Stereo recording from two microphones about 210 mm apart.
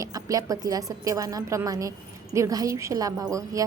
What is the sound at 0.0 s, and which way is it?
A woman's voice, 15° right (ahead or behind).